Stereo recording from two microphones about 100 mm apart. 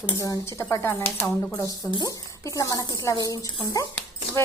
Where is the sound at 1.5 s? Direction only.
35° left (ahead or behind).